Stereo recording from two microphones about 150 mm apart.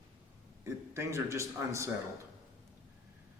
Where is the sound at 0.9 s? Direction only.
20° right (ahead or behind).